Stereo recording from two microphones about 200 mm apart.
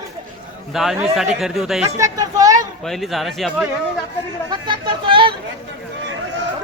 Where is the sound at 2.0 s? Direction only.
15° right (ahead or behind).